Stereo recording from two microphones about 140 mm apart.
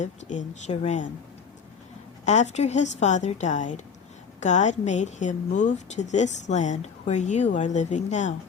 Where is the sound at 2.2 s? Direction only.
55° left (ahead or behind).